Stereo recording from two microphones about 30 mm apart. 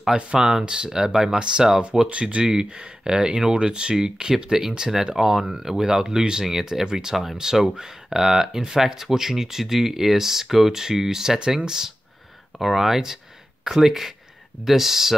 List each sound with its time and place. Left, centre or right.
0.1 s speech: right
1.3 s speech: right
6.4 s speech: centre
12.5 s speech: centre